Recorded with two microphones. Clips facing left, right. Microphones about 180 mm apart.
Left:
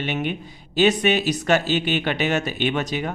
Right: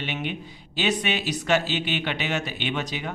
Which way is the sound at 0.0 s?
45° left (ahead or behind).